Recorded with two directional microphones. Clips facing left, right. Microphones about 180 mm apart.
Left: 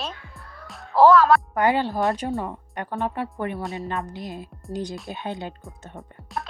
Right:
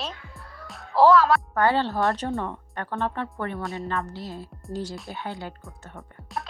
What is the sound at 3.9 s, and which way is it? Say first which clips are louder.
Speech: even; 15° left (ahead or behind).